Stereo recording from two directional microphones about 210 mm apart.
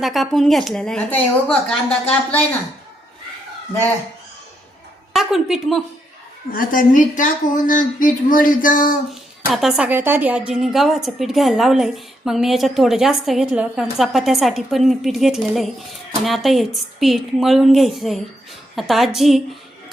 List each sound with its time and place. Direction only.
0.0 s a woman's voice: centre (ahead or behind)
5.1 s a woman's voice: centre (ahead or behind)
6.5 s a woman's voice: 40° left (ahead or behind)
9.5 s a woman's voice: centre (ahead or behind)